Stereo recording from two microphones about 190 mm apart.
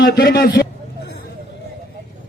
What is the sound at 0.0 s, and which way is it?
Speech, 50° left (ahead or behind).